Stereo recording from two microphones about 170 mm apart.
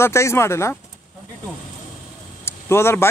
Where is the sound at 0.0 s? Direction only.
15° left (ahead or behind).